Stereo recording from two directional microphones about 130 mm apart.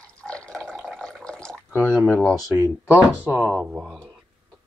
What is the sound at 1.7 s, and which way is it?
Speech, 10° left (ahead or behind).